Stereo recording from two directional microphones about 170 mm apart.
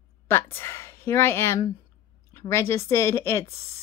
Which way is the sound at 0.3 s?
15° left (ahead or behind).